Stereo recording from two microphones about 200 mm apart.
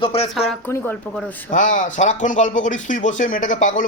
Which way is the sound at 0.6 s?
10° left (ahead or behind).